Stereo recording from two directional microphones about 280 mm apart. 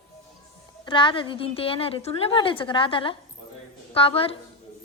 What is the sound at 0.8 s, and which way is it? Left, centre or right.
A child's voice, centre.